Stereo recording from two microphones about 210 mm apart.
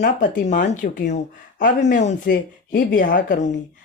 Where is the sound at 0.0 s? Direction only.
40° left (ahead or behind).